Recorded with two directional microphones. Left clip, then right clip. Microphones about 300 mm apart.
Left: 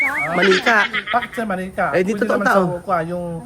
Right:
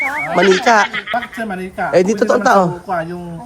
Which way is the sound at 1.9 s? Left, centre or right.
Centre.